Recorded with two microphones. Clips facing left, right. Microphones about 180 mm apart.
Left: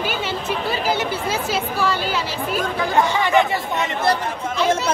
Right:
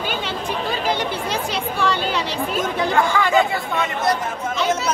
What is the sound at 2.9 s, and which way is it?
Speech, 20° left (ahead or behind).